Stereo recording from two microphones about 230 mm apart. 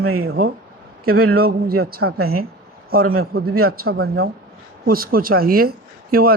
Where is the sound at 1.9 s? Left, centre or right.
Right.